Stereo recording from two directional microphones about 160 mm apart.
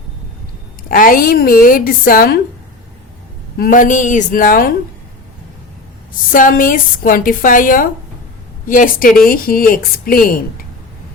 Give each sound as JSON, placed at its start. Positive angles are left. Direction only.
{"t": 0.9, "sound": "a woman's voice", "side_deg": 60}
{"t": 3.6, "sound": "a woman's voice", "side_deg": 55}
{"t": 6.3, "sound": "a woman's voice", "side_deg": 60}